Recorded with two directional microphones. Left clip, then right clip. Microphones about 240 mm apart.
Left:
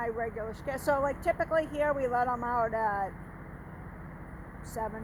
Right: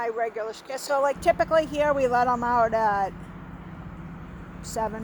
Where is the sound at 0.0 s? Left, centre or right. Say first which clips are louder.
Right 6 dB; right.